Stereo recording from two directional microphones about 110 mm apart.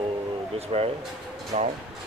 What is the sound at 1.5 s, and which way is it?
Speech, 90° right.